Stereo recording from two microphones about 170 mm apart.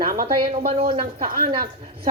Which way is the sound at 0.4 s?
35° right (ahead or behind).